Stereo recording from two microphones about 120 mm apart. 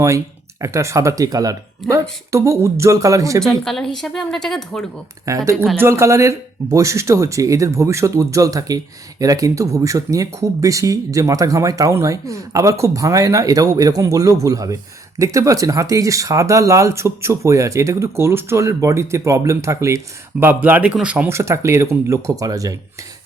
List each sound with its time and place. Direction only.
0.6 s speech: 25° right (ahead or behind)
3.4 s a woman's voice: 5° left (ahead or behind)
5.3 s speech: 25° right (ahead or behind); by 21.2 s 10° right (ahead or behind)
21.2 s speech: 25° right (ahead or behind)